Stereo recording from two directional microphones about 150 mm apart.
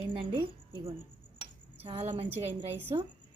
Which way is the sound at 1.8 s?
40° right (ahead or behind).